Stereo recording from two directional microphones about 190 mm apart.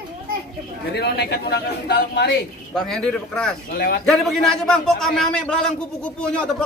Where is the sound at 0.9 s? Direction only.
60° left (ahead or behind).